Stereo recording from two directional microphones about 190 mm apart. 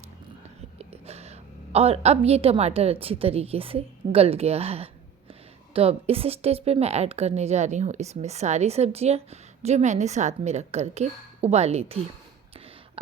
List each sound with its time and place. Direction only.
0.8 s a woman's voice: 35° right (ahead or behind)